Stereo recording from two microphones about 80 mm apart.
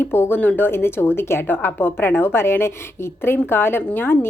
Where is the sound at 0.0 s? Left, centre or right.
Left.